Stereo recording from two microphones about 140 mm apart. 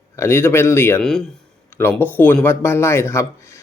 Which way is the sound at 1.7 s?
15° left (ahead or behind).